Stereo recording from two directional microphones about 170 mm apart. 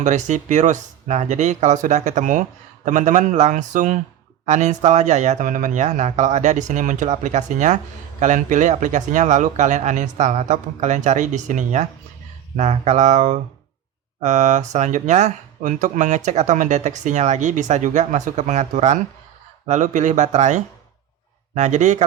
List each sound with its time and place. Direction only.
0.0 s speech: 45° right (ahead or behind)